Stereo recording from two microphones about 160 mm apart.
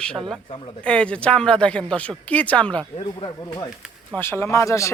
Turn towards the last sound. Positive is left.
turn(degrees=20)  # may be behind; listen again after turning